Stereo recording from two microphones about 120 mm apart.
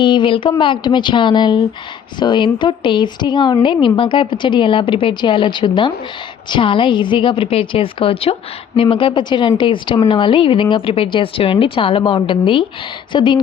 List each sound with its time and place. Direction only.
0.0 s a woman's voice: 40° left (ahead or behind)